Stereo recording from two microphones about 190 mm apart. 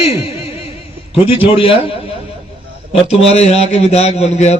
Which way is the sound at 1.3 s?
30° left (ahead or behind).